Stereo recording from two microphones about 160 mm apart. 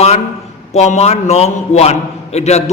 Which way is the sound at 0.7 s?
45° left (ahead or behind).